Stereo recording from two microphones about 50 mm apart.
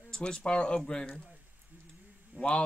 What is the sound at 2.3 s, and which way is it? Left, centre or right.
Speech, centre.